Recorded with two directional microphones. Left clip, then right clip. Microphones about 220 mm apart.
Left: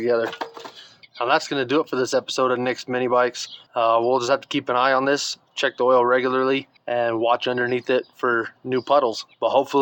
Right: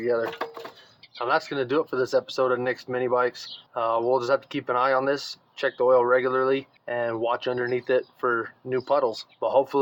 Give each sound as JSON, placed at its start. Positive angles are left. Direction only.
{"t": 0.8, "sound": "speech", "side_deg": 50}